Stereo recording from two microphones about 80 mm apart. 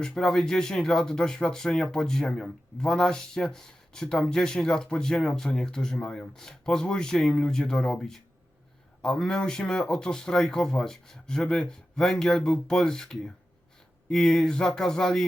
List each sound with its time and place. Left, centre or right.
0.0 s speech: centre